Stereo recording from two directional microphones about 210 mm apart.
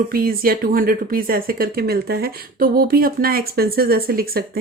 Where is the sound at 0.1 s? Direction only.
45° right (ahead or behind).